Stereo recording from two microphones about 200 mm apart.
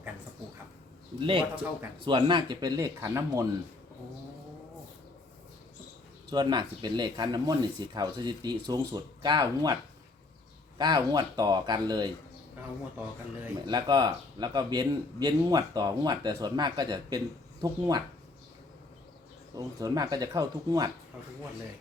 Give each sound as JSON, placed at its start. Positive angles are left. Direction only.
{"t": 1.2, "sound": "speech", "side_deg": -25}
{"t": 6.3, "sound": "speech", "side_deg": -20}
{"t": 10.8, "sound": "speech", "side_deg": -20}
{"t": 13.7, "sound": "speech", "side_deg": -20}
{"t": 19.5, "sound": "speech", "side_deg": -20}